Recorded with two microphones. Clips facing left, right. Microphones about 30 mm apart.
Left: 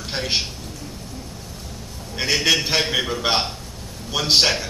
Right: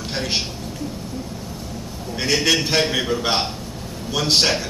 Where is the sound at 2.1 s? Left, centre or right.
Centre.